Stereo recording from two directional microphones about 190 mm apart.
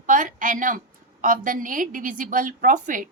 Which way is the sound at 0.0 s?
45° right (ahead or behind).